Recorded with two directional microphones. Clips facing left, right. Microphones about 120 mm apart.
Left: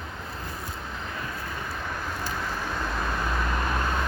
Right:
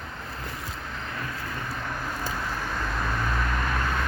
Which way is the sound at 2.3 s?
5° left (ahead or behind).